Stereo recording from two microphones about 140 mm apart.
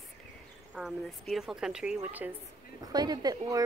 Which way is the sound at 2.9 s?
30° right (ahead or behind).